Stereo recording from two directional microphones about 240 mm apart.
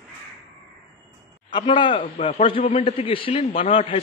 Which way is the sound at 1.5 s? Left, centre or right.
Centre.